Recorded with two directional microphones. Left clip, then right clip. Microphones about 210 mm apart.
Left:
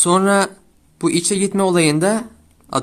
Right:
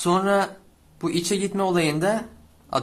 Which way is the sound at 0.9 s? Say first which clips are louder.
Left 6 dB; 35° left (ahead or behind).